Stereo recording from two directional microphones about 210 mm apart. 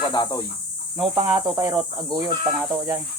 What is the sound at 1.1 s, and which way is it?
Speech, 15° right (ahead or behind).